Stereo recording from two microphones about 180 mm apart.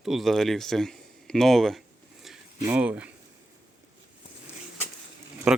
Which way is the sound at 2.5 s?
10° right (ahead or behind).